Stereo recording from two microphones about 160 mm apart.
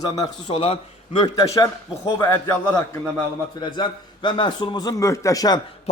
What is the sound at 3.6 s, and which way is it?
A man's voice, 30° left (ahead or behind).